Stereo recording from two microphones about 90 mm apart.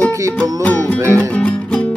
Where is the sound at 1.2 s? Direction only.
15° left (ahead or behind).